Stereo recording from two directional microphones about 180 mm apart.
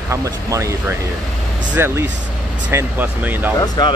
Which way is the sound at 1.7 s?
10° right (ahead or behind).